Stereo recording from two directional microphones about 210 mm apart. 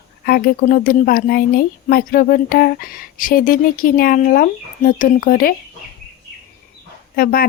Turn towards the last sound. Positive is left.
turn(degrees=45)  # may be behind; listen again after turning